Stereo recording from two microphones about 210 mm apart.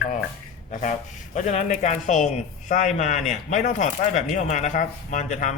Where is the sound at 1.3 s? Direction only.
35° left (ahead or behind).